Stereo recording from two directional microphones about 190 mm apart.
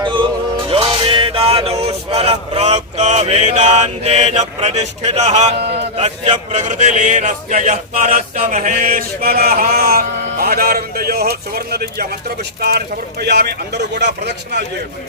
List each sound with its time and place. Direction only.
0.0 s music: 25° right (ahead or behind)
6.0 s speech: 35° right (ahead or behind); by 14.1 s 60° right (ahead or behind)